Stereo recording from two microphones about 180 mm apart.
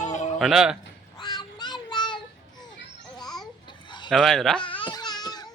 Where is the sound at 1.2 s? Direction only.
25° left (ahead or behind).